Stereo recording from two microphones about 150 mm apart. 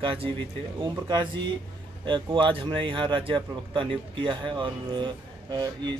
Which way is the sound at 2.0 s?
35° right (ahead or behind).